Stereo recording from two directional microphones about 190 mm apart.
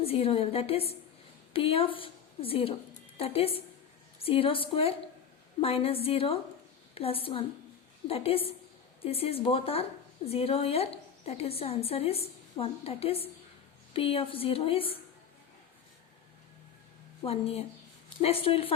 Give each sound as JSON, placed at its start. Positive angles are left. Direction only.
{"t": 0.0, "sound": "a woman's voice", "side_deg": 30}
{"t": 17.2, "sound": "a woman's voice", "side_deg": 30}